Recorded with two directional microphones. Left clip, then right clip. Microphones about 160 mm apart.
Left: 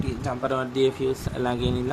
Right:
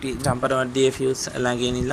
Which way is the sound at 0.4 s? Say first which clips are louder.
Right 3 dB; 15° right (ahead or behind).